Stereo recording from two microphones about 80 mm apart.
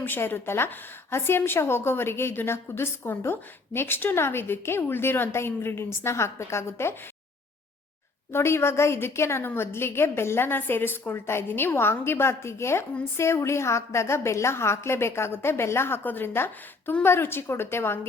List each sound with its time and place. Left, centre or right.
0.0 s a woman's voice: left
8.3 s a woman's voice: left